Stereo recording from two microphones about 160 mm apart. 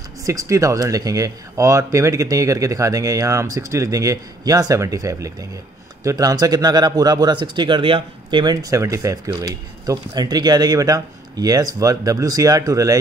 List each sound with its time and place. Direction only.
0.2 s speech: 20° right (ahead or behind)